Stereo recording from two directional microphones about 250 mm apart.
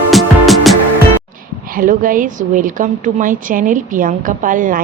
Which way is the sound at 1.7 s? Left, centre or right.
Right.